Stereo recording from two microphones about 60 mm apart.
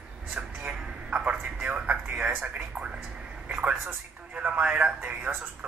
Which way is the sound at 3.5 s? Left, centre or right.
Right.